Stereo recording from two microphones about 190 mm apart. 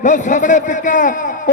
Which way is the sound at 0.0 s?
40° left (ahead or behind).